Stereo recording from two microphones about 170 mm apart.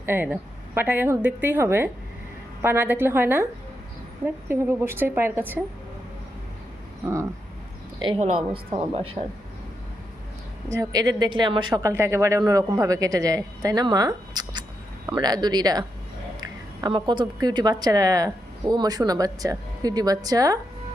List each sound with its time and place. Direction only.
0.0 s a woman's voice: 15° right (ahead or behind)
4.4 s a woman's voice: 10° right (ahead or behind)
8.0 s a woman's voice: 30° right (ahead or behind)
10.7 s a woman's voice: 20° right (ahead or behind)